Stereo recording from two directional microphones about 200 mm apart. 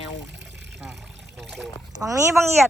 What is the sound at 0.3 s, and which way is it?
Water, 60° right (ahead or behind).